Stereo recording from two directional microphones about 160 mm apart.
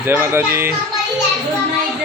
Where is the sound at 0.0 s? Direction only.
15° right (ahead or behind).